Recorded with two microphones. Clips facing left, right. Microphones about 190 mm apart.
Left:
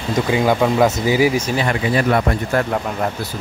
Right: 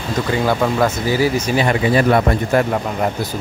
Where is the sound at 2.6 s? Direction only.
15° right (ahead or behind).